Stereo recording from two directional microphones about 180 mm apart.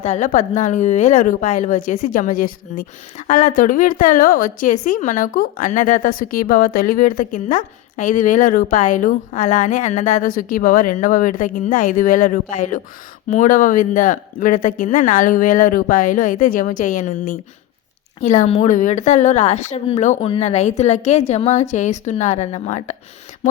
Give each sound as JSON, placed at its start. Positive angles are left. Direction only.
{"t": 0.0, "sound": "speech", "side_deg": 40}